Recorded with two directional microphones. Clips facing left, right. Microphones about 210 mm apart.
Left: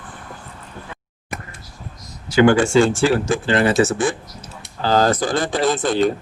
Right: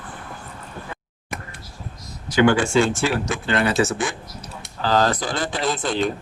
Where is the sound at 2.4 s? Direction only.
40° left (ahead or behind).